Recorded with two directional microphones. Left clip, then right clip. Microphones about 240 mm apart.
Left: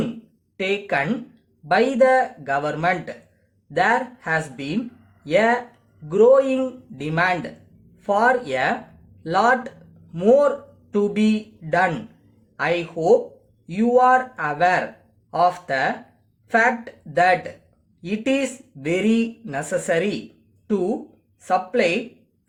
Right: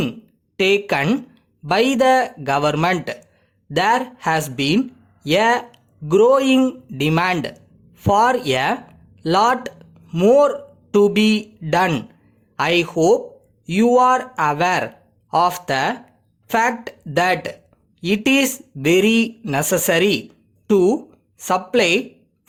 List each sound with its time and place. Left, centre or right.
0.5 s speech: right
21.3 s speech: right